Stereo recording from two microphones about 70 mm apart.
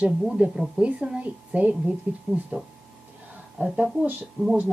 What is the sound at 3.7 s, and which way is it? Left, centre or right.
Speech, centre.